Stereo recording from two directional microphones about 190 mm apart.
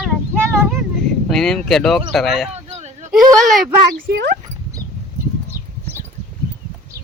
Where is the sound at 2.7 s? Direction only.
35° right (ahead or behind).